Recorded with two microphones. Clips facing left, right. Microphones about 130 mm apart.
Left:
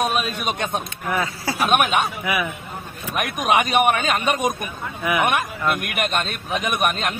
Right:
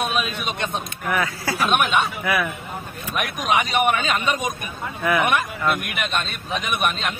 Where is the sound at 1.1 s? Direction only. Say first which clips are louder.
Even; 25° left (ahead or behind).